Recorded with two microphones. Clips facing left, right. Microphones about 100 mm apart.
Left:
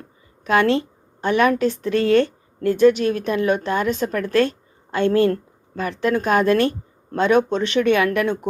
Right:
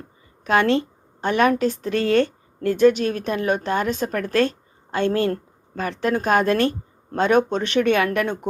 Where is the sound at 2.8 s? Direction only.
45° right (ahead or behind).